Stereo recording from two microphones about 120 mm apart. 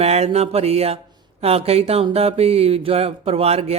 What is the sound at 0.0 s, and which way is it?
A man's voice, 60° right (ahead or behind).